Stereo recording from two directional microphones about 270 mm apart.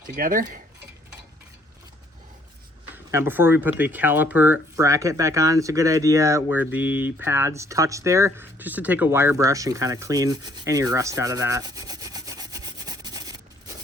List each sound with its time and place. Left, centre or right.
0.2 s cutlery: right
2.9 s speech: centre